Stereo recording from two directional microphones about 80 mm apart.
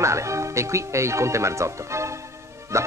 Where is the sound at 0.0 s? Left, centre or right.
Right.